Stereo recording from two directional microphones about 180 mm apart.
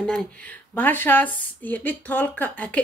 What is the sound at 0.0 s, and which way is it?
Speech, 5° left (ahead or behind).